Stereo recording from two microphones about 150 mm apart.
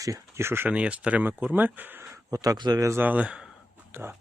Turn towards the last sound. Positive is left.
turn(degrees=-15)  # may be behind; listen again after turning